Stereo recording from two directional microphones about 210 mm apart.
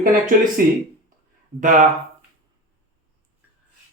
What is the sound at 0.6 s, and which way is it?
Speech, 45° right (ahead or behind).